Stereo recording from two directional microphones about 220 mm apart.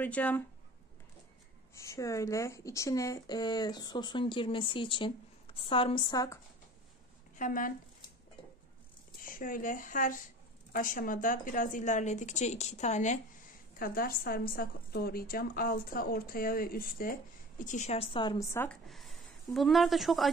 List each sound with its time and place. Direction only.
0.0 s speech: 5° left (ahead or behind)
1.8 s speech: 15° left (ahead or behind)
7.3 s a woman's voice: 35° left (ahead or behind)
9.2 s a woman's voice: 40° left (ahead or behind); by 20.2 s centre (ahead or behind)